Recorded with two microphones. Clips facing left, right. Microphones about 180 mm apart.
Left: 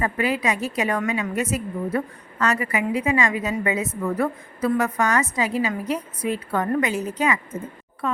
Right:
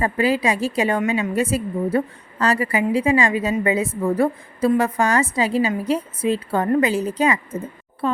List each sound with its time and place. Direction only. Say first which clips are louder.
0.0 s a woman's voice: right 4 dB; 30° right (ahead or behind)